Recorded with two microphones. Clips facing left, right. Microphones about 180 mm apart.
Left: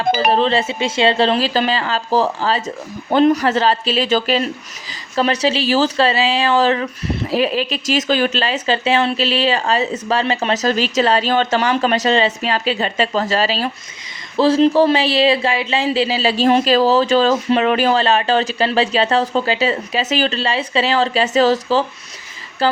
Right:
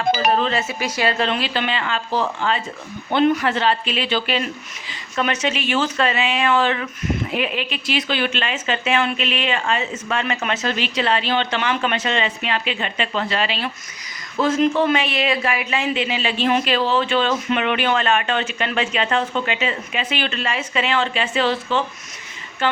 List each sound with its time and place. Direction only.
0.3 s speech: 30° left (ahead or behind)